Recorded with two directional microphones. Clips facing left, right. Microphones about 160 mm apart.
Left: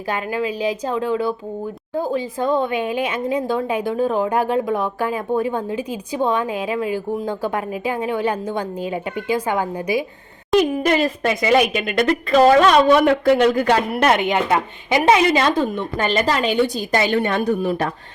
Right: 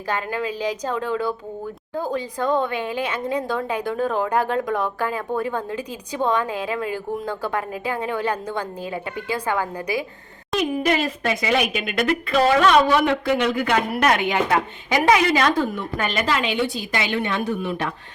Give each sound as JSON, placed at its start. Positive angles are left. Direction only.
{"t": 0.1, "sound": "a woman's voice", "side_deg": 10}
{"t": 2.4, "sound": "a woman's voice", "side_deg": 15}
{"t": 10.8, "sound": "a woman's voice", "side_deg": 45}
{"t": 13.9, "sound": "a woman's voice", "side_deg": 25}